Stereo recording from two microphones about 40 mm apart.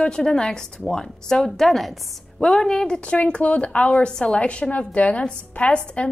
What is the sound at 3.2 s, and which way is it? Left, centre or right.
Speech, left.